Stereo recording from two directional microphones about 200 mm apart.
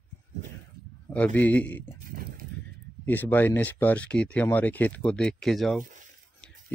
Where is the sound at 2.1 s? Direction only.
45° right (ahead or behind).